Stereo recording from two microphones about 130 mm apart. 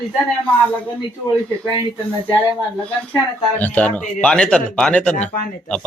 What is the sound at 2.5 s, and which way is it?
Speech, 10° left (ahead or behind).